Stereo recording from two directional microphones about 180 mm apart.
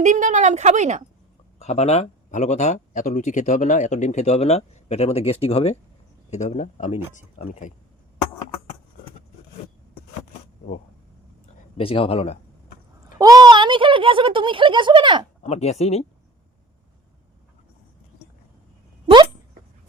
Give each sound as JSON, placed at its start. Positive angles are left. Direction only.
{"t": 0.0, "sound": "a woman's voice", "side_deg": -45}
{"t": 1.5, "sound": "speech", "side_deg": 35}
{"t": 11.8, "sound": "speech", "side_deg": 30}
{"t": 13.1, "sound": "speech", "side_deg": -20}
{"t": 15.4, "sound": "speech", "side_deg": 35}